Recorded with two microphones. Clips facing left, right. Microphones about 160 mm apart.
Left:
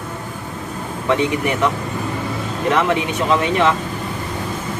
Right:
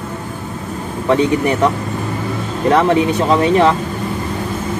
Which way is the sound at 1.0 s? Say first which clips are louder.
Right 4 dB; 35° right (ahead or behind).